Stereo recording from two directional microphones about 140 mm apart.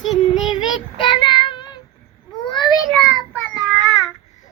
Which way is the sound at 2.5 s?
35° left (ahead or behind).